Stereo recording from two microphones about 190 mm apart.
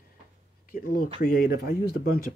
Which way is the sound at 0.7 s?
50° left (ahead or behind).